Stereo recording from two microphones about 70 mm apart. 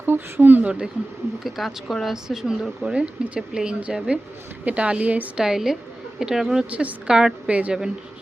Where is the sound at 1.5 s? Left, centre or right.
Centre; by 5.3 s right.